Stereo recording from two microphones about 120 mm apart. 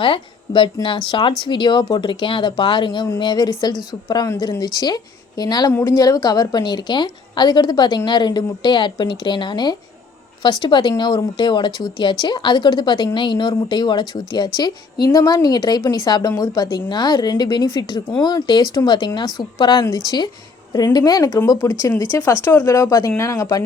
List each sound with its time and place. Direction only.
0.0 s a woman's voice: 45° left (ahead or behind); by 23.6 s 30° left (ahead or behind)